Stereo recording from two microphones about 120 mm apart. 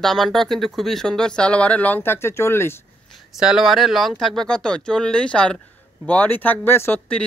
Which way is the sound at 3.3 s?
5° right (ahead or behind).